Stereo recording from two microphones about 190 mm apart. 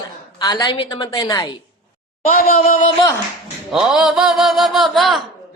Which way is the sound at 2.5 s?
40° left (ahead or behind).